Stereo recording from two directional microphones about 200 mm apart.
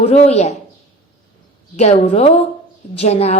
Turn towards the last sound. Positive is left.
turn(degrees=30)  # may be behind; listen again after turning